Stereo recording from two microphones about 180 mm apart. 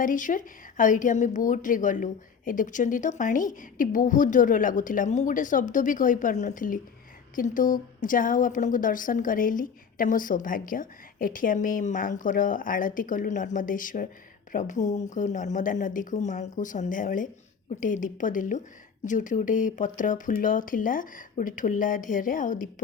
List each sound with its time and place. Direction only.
0.0 s speech: 45° left (ahead or behind)